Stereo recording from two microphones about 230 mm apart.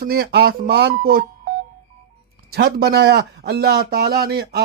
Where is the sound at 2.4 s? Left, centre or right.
Right.